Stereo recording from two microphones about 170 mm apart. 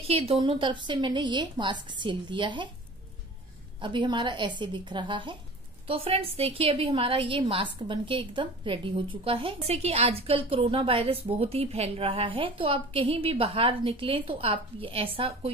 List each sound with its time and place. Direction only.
0.0 s a woman's voice: 35° right (ahead or behind)
3.8 s a woman's voice: 30° right (ahead or behind)